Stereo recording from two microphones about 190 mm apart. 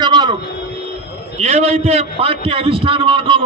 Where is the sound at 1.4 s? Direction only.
30° right (ahead or behind).